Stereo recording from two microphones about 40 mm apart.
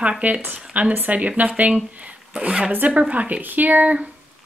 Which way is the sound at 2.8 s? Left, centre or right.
Right.